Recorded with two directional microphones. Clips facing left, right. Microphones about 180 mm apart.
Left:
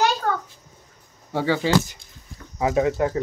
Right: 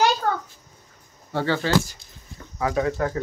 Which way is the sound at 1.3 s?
10° left (ahead or behind).